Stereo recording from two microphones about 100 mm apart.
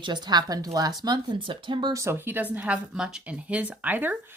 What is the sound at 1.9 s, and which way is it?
Speech, 30° right (ahead or behind).